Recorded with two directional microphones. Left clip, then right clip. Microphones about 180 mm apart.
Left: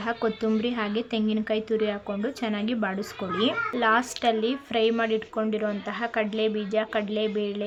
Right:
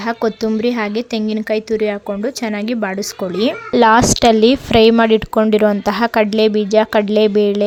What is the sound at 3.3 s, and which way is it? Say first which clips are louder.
A child's voice: right 10 dB; 55° right (ahead or behind).